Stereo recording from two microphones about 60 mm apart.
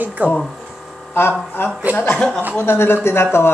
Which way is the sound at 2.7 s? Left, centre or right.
Left.